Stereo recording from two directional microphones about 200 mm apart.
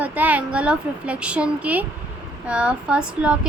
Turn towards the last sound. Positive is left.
turn(degrees=-5)  # may be behind; listen again after turning